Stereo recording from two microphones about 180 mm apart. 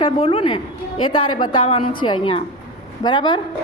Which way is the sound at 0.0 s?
30° left (ahead or behind).